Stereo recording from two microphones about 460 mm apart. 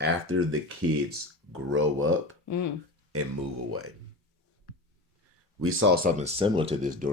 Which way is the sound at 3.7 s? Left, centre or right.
Right.